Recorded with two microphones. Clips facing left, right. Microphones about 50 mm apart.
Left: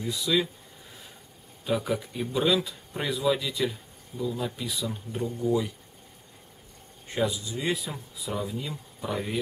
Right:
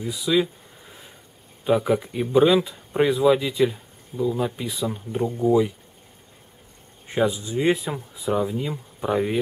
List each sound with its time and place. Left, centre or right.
0.0 s speech: centre
1.6 s speech: right
7.1 s speech: right